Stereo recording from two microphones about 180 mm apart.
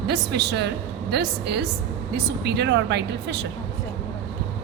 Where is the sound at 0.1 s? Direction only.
70° right (ahead or behind).